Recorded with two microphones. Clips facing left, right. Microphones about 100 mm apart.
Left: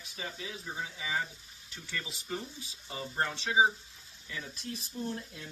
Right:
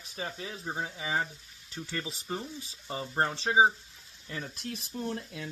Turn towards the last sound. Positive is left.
turn(degrees=-75)  # may be behind; listen again after turning